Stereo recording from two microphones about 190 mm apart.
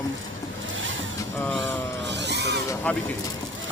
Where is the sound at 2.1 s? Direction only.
65° right (ahead or behind).